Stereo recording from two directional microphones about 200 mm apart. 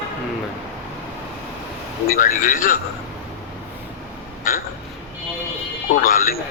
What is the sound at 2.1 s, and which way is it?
Speech, 40° left (ahead or behind).